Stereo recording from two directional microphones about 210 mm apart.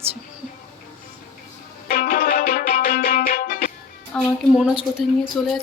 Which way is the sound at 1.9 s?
45° left (ahead or behind).